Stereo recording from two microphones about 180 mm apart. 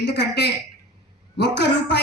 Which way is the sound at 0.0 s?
70° left (ahead or behind).